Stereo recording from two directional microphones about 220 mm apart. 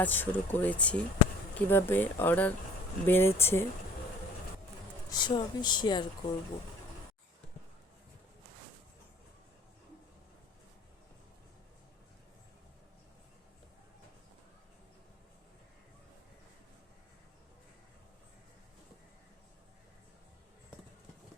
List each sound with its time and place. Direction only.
0.0 s speech: 10° left (ahead or behind)
5.1 s speech: 20° left (ahead or behind)